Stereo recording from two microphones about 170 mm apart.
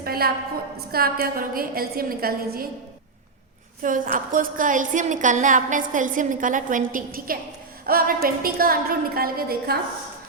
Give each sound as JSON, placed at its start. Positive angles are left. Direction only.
{"t": 0.0, "sound": "a sound", "side_deg": -60}
{"t": 0.9, "sound": "a woman's voice", "side_deg": -60}
{"t": 3.8, "sound": "a woman's voice", "side_deg": -50}